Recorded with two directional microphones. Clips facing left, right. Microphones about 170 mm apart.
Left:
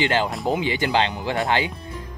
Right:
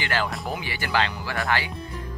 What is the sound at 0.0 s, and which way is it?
Speech, 20° left (ahead or behind).